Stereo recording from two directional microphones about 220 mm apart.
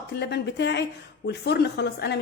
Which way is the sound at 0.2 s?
50° left (ahead or behind).